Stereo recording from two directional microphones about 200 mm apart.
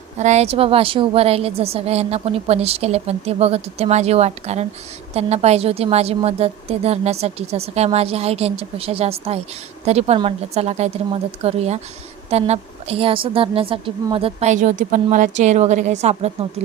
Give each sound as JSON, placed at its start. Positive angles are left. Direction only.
{"t": 0.2, "sound": "a woman's voice", "side_deg": -35}